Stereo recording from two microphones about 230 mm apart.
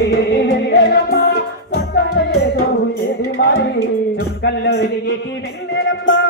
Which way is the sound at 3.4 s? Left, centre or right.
Left.